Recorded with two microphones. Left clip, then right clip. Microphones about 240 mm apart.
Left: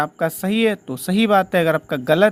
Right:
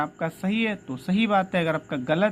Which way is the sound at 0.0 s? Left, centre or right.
Left.